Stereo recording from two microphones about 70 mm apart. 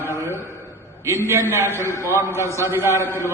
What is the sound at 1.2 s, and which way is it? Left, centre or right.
A man's voice, right.